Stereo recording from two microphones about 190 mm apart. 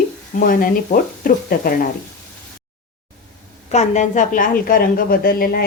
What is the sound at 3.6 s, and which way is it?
A woman's voice, 40° left (ahead or behind).